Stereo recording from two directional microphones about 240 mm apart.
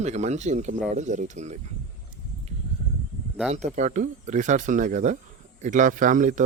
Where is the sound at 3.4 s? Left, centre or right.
Right.